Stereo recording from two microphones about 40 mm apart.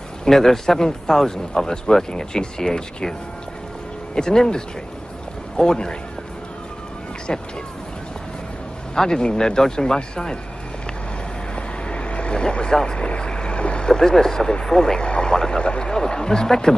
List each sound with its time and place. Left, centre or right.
0.2 s a man's voice: centre
7.3 s speech: left
8.9 s a man's voice: centre
11.9 s vehicle: left
13.2 s a man's voice: left